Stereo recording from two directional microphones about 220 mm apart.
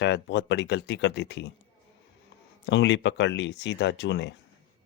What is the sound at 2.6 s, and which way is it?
Speech, 55° left (ahead or behind).